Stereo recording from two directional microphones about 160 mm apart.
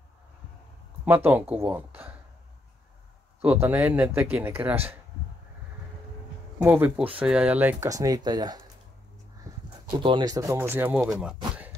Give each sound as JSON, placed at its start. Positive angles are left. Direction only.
{"t": 1.0, "sound": "speech", "side_deg": -10}
{"t": 3.4, "sound": "speech", "side_deg": -15}
{"t": 6.6, "sound": "speech", "side_deg": -10}
{"t": 9.5, "sound": "a sound", "side_deg": -20}
{"t": 9.9, "sound": "speech", "side_deg": -30}